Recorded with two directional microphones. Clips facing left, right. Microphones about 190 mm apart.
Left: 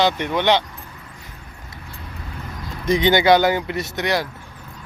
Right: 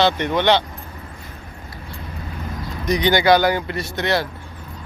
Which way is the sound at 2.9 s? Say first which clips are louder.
Left 1 dB; 20° left (ahead or behind).